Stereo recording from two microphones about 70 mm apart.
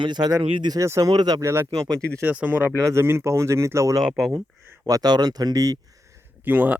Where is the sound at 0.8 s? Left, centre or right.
Right.